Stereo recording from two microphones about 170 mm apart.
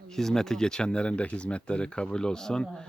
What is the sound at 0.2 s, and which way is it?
Speech, 5° left (ahead or behind).